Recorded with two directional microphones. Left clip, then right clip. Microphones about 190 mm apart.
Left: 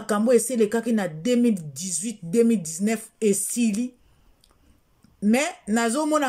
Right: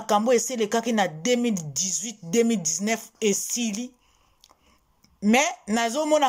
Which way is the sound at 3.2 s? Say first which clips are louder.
Left 4 dB; 35° left (ahead or behind).